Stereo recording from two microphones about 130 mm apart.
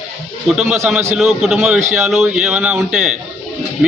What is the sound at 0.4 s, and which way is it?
A man's voice, 5° right (ahead or behind).